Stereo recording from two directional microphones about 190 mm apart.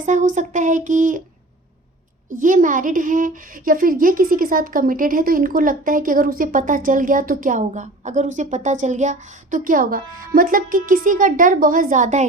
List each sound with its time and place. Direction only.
0.0 s speech: 40° right (ahead or behind)
2.3 s speech: 45° right (ahead or behind)